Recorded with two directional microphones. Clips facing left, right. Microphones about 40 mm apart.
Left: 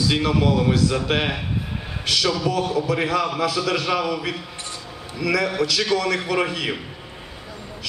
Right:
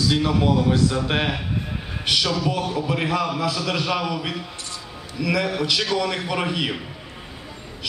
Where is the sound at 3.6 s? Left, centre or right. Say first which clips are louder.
Left 2 dB; centre.